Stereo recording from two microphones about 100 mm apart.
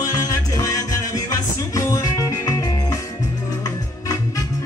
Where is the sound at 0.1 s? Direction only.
35° left (ahead or behind).